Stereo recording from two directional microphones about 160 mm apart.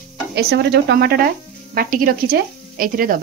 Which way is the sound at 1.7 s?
65° right (ahead or behind).